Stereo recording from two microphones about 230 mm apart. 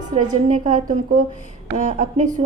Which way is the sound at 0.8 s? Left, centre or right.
Right.